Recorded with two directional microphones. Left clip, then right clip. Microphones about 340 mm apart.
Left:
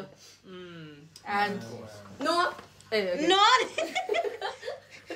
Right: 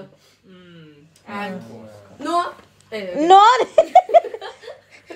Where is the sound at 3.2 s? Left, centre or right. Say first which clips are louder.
Right 12 dB; centre.